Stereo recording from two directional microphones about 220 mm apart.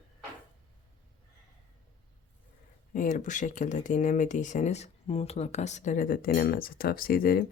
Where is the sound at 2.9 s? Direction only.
35° left (ahead or behind).